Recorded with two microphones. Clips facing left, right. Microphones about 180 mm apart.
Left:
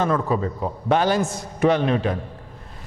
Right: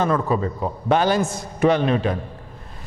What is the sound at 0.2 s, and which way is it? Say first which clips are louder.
Speech: right 1 dB; 25° right (ahead or behind).